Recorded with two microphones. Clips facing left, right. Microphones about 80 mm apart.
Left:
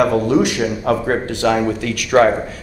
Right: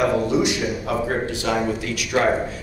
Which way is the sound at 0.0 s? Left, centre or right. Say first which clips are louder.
Left 5 dB; left.